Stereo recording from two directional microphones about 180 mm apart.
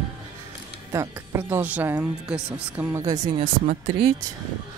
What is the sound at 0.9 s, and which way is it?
Speech, 15° right (ahead or behind).